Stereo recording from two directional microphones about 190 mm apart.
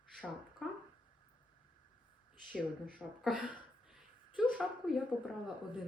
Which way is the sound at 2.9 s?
5° right (ahead or behind).